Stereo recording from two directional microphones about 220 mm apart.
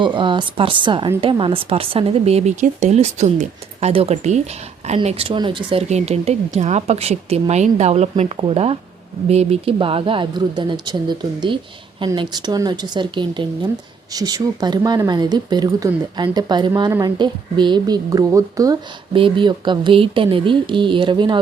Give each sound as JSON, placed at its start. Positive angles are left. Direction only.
{"t": 0.0, "sound": "speech", "side_deg": -20}